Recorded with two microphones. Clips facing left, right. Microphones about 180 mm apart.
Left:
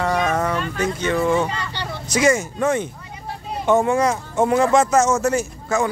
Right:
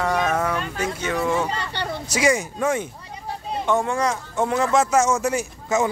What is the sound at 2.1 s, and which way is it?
Speech, 10° right (ahead or behind).